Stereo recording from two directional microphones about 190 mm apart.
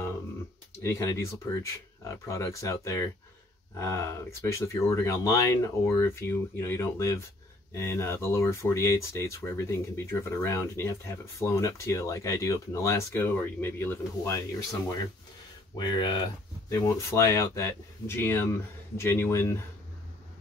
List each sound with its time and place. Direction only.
0.8 s speech: 15° left (ahead or behind)